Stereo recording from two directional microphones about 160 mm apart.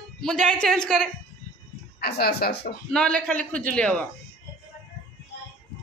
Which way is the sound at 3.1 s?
5° left (ahead or behind).